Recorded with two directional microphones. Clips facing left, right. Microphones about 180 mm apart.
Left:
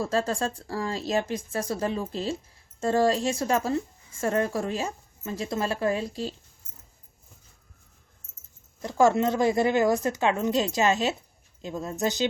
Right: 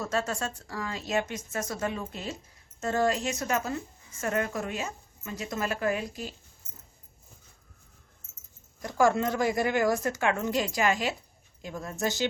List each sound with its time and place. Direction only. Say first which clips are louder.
0.0 s speech: left 4 dB; 30° left (ahead or behind)
8.8 s speech: left 3 dB; 25° left (ahead or behind)